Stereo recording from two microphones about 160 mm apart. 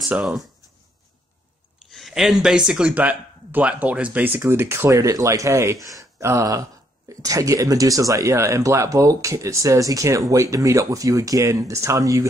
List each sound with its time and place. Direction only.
0.1 s speech: 5° right (ahead or behind)
1.9 s speech: centre (ahead or behind); by 12.3 s 20° right (ahead or behind)